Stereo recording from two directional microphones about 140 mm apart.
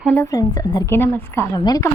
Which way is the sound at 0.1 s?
20° left (ahead or behind).